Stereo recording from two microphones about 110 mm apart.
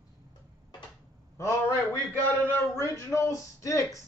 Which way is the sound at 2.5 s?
20° left (ahead or behind).